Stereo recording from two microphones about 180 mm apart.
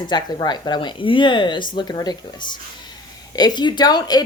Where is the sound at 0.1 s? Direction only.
25° left (ahead or behind).